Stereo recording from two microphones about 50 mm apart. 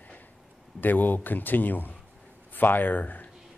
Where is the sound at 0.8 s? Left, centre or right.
Left.